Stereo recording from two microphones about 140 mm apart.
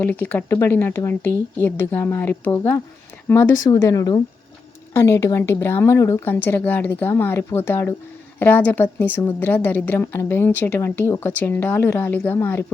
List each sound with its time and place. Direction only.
0.0 s a woman's voice: 15° left (ahead or behind)